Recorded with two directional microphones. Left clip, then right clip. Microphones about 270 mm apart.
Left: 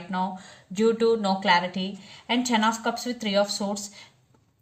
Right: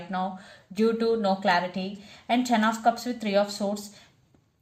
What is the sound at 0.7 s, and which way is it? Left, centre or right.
Speech, left.